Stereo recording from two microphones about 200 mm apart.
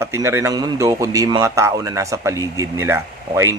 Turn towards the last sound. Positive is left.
turn(degrees=-15)  # may be behind; listen again after turning